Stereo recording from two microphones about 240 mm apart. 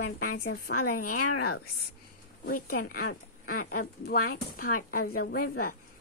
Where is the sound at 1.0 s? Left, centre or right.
Left.